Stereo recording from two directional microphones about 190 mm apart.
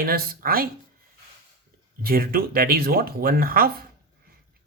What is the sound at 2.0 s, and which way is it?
Speech, 50° right (ahead or behind).